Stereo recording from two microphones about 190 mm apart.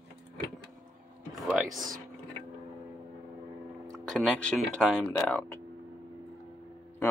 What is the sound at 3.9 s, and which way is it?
Speech, centre (ahead or behind).